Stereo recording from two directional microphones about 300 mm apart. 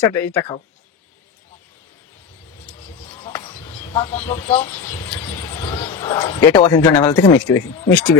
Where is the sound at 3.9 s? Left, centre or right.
Centre.